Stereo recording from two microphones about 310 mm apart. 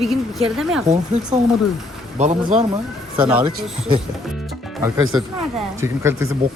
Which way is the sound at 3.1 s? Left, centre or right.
Centre.